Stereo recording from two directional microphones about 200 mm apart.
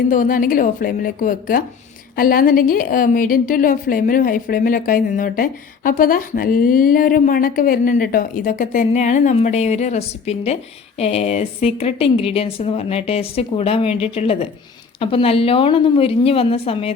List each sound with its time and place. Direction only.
0.1 s a woman's voice: 45° left (ahead or behind)